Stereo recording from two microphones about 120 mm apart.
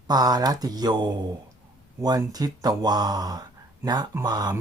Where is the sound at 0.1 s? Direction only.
35° right (ahead or behind).